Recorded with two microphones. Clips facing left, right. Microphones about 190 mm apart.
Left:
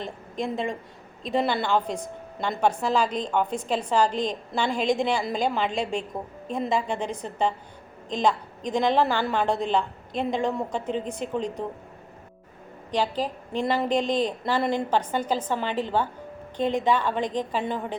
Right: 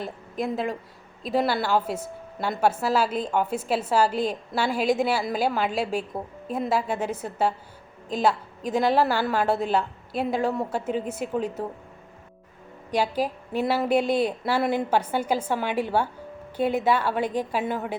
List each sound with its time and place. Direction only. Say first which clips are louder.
0.0 s a woman's voice: right 1 dB; 5° right (ahead or behind)
12.9 s a woman's voice: right 1 dB; 10° right (ahead or behind)